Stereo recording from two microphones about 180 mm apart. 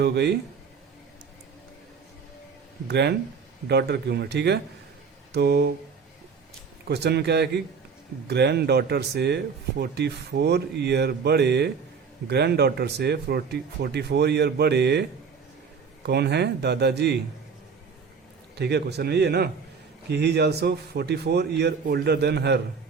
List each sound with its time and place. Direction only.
0.0 s speech: 70° right (ahead or behind)
2.8 s a man's voice: 65° right (ahead or behind)
6.8 s speech: 65° right (ahead or behind)
16.0 s speech: 65° right (ahead or behind)
18.6 s a man's voice: 65° right (ahead or behind)